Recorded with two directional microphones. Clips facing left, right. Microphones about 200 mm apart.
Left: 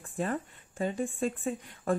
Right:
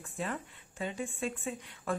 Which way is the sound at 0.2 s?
45° left (ahead or behind).